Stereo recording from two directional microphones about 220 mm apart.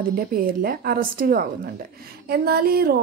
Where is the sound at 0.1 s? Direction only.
40° right (ahead or behind).